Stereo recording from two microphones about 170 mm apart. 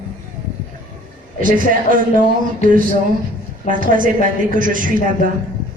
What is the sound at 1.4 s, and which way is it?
Speech, 55° right (ahead or behind).